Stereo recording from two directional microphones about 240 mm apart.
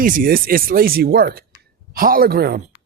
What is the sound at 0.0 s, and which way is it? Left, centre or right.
Speech, right.